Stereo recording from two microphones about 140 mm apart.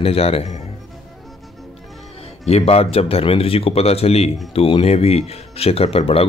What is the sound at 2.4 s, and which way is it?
Speech, 45° left (ahead or behind).